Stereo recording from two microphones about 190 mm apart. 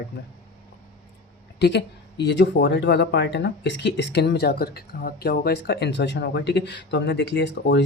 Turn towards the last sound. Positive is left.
turn(degrees=65)  # may be behind; listen again after turning